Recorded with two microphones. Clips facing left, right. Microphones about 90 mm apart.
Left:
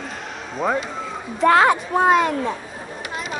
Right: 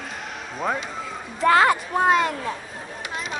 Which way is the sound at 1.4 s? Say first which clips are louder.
Left 2 dB; centre (ahead or behind).